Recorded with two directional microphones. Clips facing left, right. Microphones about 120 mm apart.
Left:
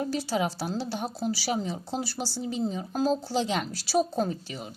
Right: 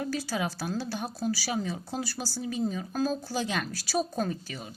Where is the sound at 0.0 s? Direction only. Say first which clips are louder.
Left 3 dB; 25° left (ahead or behind).